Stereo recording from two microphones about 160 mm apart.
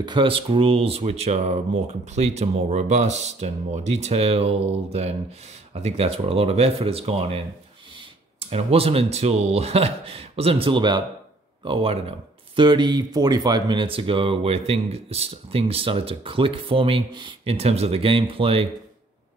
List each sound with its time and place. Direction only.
0.0 s speech: 30° right (ahead or behind)